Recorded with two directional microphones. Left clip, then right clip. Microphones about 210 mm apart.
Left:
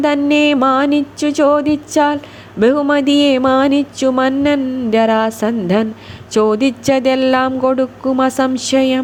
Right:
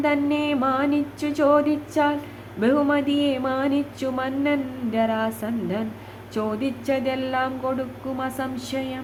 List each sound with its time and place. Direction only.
0.0 s speech: 45° left (ahead or behind)